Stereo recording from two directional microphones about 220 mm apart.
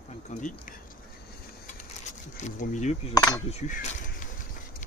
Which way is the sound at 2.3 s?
35° left (ahead or behind).